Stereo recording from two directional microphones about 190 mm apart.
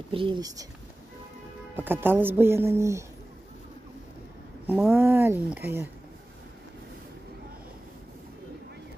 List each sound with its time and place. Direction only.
0.1 s speech: 25° right (ahead or behind)
1.8 s speech: 10° right (ahead or behind)
4.6 s speech: 10° right (ahead or behind)